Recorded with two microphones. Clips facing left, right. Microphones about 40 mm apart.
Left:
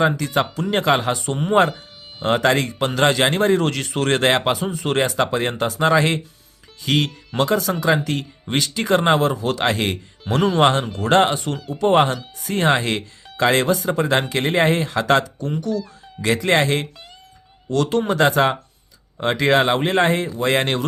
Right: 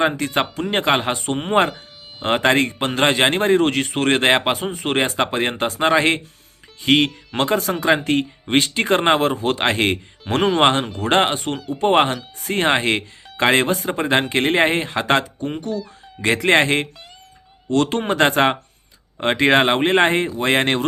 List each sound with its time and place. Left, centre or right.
0.0 s speech: right